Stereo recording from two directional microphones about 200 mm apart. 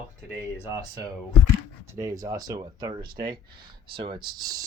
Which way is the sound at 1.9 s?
15° right (ahead or behind).